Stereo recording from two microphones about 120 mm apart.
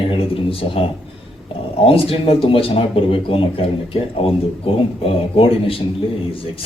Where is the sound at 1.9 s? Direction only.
50° left (ahead or behind).